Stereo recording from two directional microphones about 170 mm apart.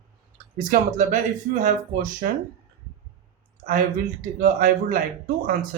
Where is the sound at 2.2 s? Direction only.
50° right (ahead or behind).